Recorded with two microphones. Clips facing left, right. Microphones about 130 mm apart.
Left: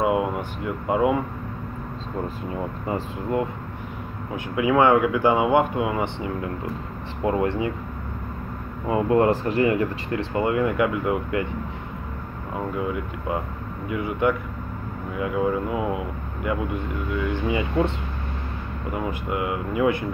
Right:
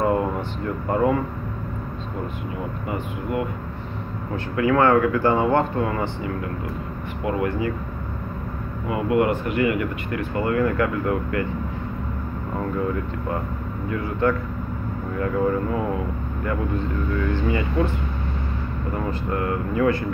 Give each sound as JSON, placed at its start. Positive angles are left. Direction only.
{"t": 0.0, "sound": "air conditioning", "side_deg": 10}
{"t": 0.8, "sound": "speech", "side_deg": 10}
{"t": 2.9, "sound": "speech", "side_deg": 30}
{"t": 4.6, "sound": "speech", "side_deg": 15}
{"t": 7.2, "sound": "speech", "side_deg": 25}
{"t": 8.8, "sound": "speech", "side_deg": 30}
{"t": 12.5, "sound": "speech", "side_deg": 10}